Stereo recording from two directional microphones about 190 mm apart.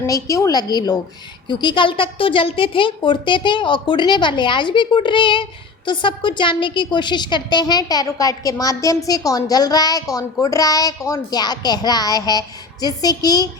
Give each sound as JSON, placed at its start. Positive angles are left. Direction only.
{"t": 0.0, "sound": "a woman's voice", "side_deg": 15}